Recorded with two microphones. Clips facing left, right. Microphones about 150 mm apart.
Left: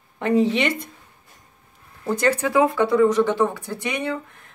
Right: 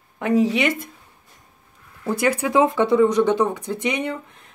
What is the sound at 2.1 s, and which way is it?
Speech, 10° right (ahead or behind).